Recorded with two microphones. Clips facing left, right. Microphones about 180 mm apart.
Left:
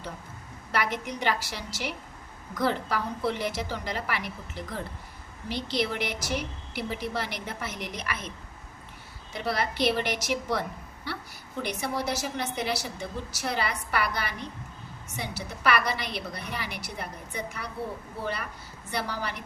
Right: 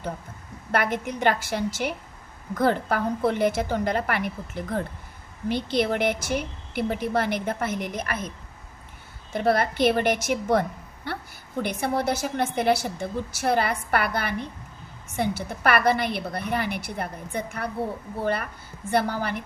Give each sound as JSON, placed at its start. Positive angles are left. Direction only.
{"t": 0.7, "sound": "a woman's voice", "side_deg": -50}
{"t": 9.3, "sound": "a woman's voice", "side_deg": -50}
{"t": 11.1, "sound": "a sound", "side_deg": -50}
{"t": 11.6, "sound": "a woman's voice", "side_deg": -55}
{"t": 18.9, "sound": "a woman's voice", "side_deg": -55}